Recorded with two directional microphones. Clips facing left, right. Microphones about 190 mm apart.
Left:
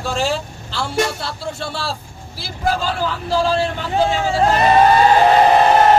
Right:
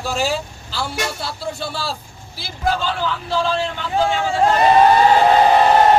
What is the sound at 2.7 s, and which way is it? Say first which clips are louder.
A man's voice: left 1 dB; 35° left (ahead or behind).